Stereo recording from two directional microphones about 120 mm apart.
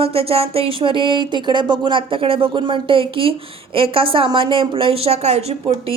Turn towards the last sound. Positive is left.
turn(degrees=-60)  # may be behind; listen again after turning